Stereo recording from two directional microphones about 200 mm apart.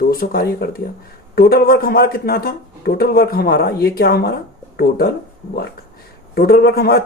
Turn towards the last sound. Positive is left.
turn(degrees=50)  # may be behind; listen again after turning